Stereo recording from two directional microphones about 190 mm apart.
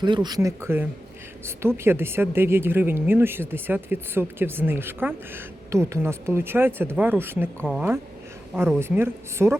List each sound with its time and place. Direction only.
0.0 s speech: 25° right (ahead or behind)